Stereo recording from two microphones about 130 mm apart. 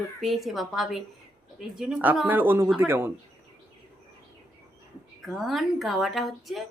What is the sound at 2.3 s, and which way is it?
Speech, 15° right (ahead or behind).